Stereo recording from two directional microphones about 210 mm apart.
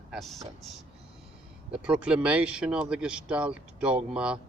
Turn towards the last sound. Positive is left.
turn(degrees=-5)  # may be behind; listen again after turning